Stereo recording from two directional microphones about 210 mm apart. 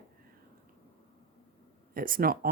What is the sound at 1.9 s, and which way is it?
Speech, 45° right (ahead or behind).